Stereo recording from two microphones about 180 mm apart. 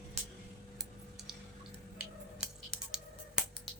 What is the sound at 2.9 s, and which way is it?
Finger snapping, 5° right (ahead or behind).